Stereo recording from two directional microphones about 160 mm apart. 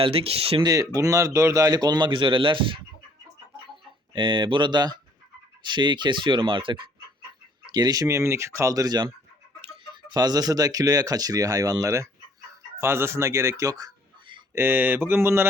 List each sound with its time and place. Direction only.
0.0 s speech: 35° right (ahead or behind)
0.9 s speech: 20° right (ahead or behind)
4.1 s speech: 30° right (ahead or behind)
14.5 s mantra: 15° right (ahead or behind)